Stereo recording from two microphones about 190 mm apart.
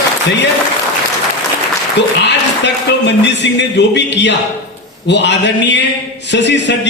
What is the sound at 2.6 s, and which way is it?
A man's voice, 65° left (ahead or behind).